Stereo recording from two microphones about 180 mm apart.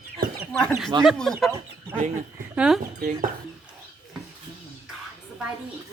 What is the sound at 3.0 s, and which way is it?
Speech, 50° right (ahead or behind).